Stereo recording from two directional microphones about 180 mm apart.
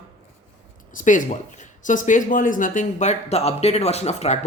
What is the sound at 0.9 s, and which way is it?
Speech, 45° left (ahead or behind).